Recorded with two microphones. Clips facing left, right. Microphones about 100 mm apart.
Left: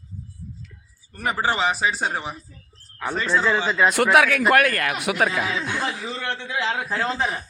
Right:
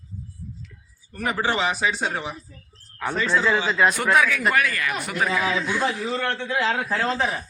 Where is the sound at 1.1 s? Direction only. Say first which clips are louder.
Left 1 dB; 30° left (ahead or behind).